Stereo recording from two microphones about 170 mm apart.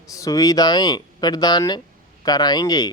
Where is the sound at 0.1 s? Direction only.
20° left (ahead or behind).